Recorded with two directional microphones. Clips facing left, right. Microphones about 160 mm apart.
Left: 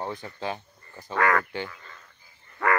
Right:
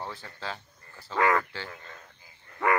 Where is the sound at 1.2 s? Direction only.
20° right (ahead or behind).